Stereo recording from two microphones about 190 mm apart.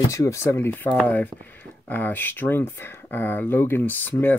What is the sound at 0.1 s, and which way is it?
Speech, 15° left (ahead or behind).